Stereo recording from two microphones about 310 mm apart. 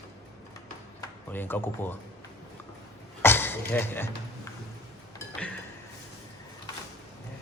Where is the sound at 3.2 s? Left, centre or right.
Centre.